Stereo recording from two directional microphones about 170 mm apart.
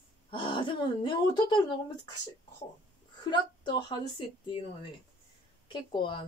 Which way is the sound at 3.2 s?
30° left (ahead or behind).